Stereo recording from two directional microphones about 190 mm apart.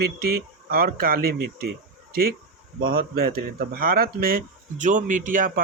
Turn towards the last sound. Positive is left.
turn(degrees=-45)  # may be behind; listen again after turning